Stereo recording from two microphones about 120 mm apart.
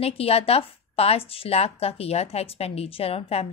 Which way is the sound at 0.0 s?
55° left (ahead or behind).